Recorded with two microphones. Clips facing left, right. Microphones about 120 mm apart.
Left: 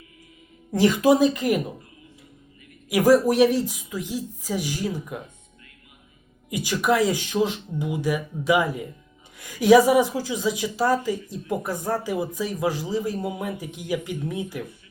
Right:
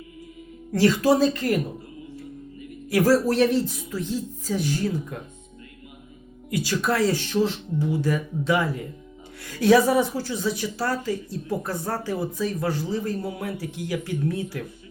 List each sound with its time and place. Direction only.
0.7 s a woman's voice: 15° left (ahead or behind)
2.9 s a woman's voice: 15° left (ahead or behind)
6.5 s a woman's voice: 15° left (ahead or behind)